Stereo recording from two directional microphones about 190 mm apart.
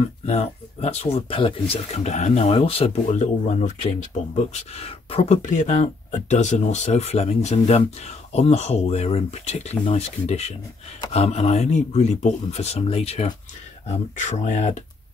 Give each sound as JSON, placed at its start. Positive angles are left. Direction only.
{"t": 0.3, "sound": "speech", "side_deg": 35}